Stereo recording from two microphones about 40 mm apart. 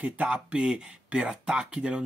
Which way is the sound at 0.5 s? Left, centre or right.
Right.